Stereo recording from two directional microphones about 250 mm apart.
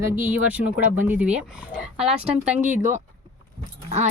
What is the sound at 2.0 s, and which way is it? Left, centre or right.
Speech, right.